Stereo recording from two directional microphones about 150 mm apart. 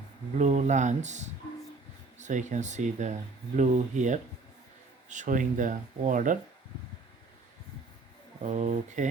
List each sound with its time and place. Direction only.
0.3 s speech: 55° right (ahead or behind)
8.4 s speech: 55° right (ahead or behind)